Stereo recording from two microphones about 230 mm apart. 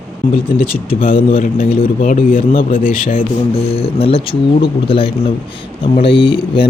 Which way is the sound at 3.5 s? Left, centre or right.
Left.